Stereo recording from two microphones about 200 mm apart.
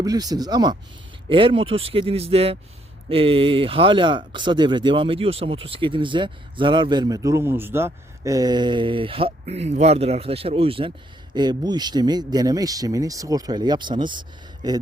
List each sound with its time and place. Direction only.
0.0 s speech: 20° right (ahead or behind)